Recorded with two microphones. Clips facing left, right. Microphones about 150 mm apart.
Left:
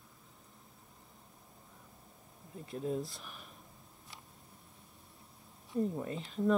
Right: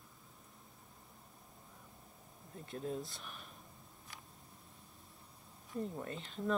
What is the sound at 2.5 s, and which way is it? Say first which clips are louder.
Speech: left 5 dB; 5° left (ahead or behind).